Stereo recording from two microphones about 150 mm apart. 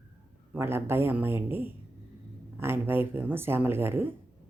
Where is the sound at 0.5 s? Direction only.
15° right (ahead or behind).